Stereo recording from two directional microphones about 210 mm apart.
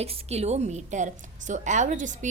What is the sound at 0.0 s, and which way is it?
A woman's voice, 30° right (ahead or behind).